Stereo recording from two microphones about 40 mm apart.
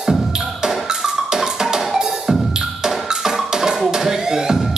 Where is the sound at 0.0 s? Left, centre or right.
Centre.